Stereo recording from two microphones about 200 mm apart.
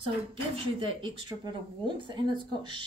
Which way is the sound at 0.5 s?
25° right (ahead or behind).